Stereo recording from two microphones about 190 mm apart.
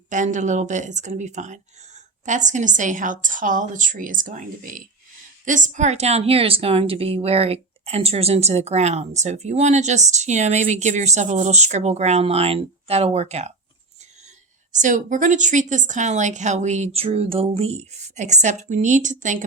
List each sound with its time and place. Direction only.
0.1 s a woman's voice: 40° right (ahead or behind)
14.8 s a woman's voice: 40° right (ahead or behind)